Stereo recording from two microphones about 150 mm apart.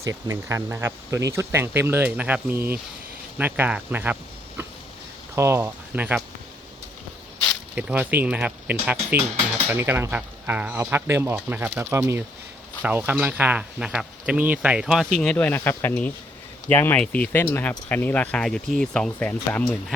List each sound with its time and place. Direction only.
0.0 s speech: 20° right (ahead or behind)
7.8 s speech: 10° right (ahead or behind)
15.2 s speech: 10° left (ahead or behind)